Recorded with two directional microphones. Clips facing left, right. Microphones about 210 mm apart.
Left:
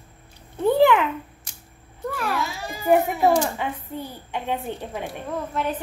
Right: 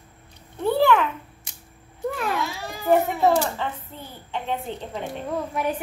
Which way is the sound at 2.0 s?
20° right (ahead or behind).